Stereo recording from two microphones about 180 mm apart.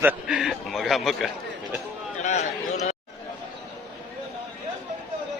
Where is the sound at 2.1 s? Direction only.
40° left (ahead or behind).